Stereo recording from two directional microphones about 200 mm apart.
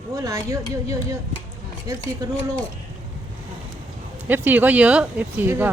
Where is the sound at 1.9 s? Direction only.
15° right (ahead or behind).